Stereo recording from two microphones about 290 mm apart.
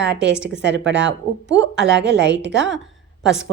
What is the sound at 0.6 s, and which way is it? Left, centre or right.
Speech, right.